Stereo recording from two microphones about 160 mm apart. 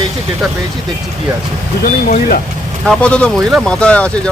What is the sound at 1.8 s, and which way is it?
Speech, 65° left (ahead or behind).